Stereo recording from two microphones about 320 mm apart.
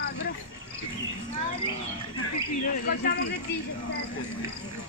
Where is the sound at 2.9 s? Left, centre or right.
Left.